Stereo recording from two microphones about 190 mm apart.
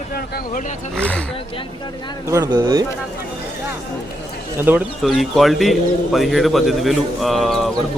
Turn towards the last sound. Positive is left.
turn(degrees=0)  # may be behind; listen again after turning